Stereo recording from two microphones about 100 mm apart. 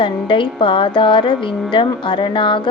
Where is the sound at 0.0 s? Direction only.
55° left (ahead or behind).